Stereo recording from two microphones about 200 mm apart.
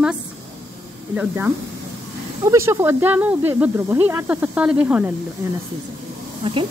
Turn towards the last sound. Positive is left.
turn(degrees=-25)  # may be behind; listen again after turning